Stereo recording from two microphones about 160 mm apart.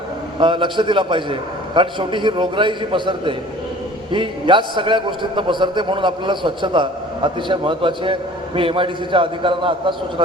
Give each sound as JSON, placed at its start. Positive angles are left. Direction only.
{"t": 0.3, "sound": "a man's voice", "side_deg": -30}